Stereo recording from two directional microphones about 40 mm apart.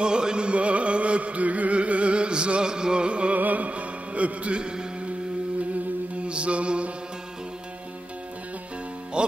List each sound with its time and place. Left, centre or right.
0.0 s music: right
3.3 s music: right
6.2 s mantra: right